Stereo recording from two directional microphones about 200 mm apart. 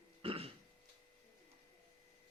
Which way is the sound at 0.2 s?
30° right (ahead or behind).